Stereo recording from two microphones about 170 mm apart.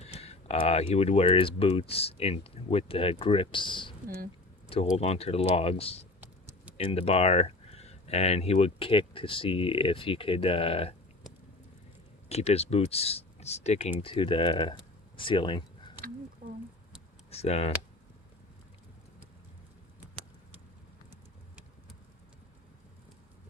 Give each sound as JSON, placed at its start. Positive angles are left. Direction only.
{"t": 0.0, "sound": "speech", "side_deg": 35}
{"t": 4.9, "sound": "speech", "side_deg": 35}
{"t": 6.1, "sound": "a sound", "side_deg": -10}
{"t": 6.7, "sound": "speech", "side_deg": 35}
{"t": 12.3, "sound": "speech", "side_deg": 40}
{"t": 17.3, "sound": "speech", "side_deg": 35}
{"t": 21.1, "sound": "vehicle", "side_deg": -5}